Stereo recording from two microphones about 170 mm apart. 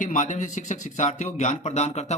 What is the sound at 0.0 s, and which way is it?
Speech, 45° left (ahead or behind).